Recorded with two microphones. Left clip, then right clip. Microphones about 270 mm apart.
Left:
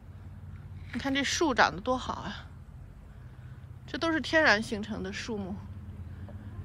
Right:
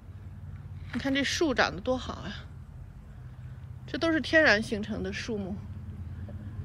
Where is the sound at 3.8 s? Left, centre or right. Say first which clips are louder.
Right 2 dB; centre.